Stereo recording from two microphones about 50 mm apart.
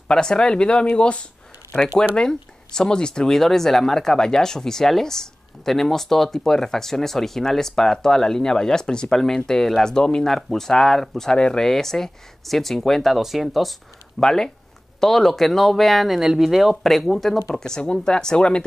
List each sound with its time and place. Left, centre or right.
0.1 s speech: centre
14.2 s speech: centre
17.6 s speech: centre